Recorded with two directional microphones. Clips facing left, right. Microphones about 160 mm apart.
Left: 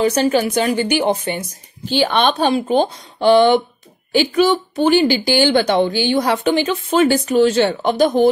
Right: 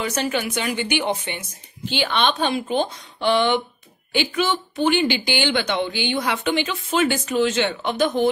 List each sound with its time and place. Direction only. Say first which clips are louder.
0.0 s a woman's voice: left 8 dB; 35° left (ahead or behind)